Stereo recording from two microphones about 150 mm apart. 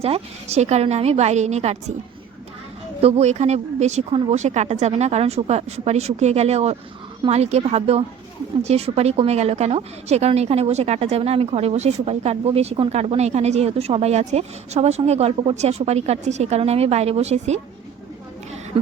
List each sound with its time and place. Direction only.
0.0 s a woman's voice: 45° right (ahead or behind)
3.0 s a woman's voice: 45° right (ahead or behind)